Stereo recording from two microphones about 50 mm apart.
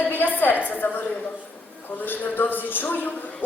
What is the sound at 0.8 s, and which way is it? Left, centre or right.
Speech, left.